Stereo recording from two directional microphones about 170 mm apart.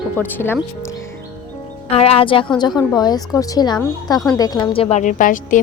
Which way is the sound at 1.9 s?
35° left (ahead or behind).